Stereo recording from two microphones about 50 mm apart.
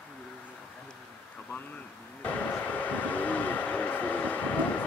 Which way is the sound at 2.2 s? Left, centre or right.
Left.